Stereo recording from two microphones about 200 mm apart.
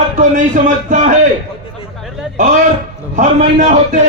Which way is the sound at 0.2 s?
40° right (ahead or behind).